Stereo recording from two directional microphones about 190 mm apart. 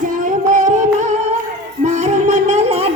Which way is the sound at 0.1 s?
40° right (ahead or behind).